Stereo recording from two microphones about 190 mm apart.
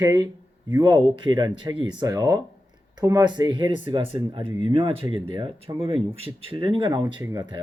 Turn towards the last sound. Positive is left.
turn(degrees=-25)  # may be behind; listen again after turning